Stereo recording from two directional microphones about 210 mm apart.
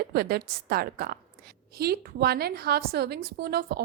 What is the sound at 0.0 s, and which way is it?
A woman's voice, 45° right (ahead or behind).